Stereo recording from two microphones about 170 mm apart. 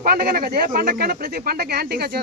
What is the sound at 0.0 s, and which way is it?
Speech, 60° right (ahead or behind).